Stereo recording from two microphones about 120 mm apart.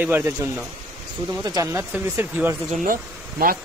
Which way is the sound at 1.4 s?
25° right (ahead or behind).